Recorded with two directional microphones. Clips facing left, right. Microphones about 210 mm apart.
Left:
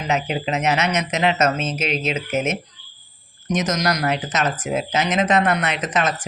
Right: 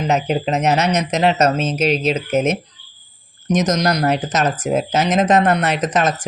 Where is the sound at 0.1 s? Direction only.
40° right (ahead or behind).